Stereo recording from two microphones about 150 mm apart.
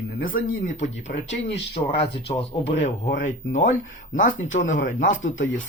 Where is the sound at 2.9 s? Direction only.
55° left (ahead or behind).